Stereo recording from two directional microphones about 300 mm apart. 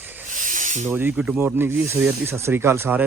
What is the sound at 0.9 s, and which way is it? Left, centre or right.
Speech, centre.